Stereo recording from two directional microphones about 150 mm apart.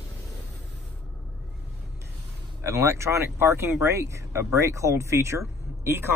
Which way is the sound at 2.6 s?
20° right (ahead or behind).